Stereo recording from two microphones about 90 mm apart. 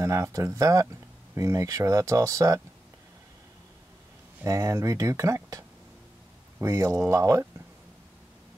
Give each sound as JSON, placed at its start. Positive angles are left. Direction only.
{"t": 0.0, "sound": "speech", "side_deg": -35}
{"t": 4.5, "sound": "speech", "side_deg": -35}
{"t": 6.6, "sound": "speech", "side_deg": -35}